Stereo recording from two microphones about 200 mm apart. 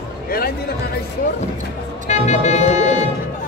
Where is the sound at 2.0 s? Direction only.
35° left (ahead or behind).